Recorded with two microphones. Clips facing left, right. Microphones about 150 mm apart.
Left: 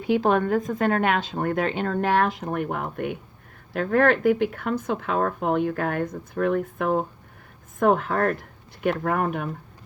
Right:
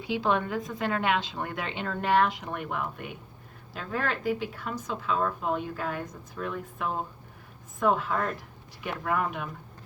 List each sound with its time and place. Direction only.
0.0 s a woman's voice: 50° left (ahead or behind)